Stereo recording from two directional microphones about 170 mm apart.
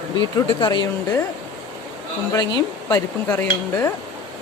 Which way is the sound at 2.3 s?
20° left (ahead or behind).